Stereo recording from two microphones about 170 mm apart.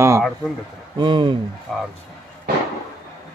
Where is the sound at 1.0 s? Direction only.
30° right (ahead or behind).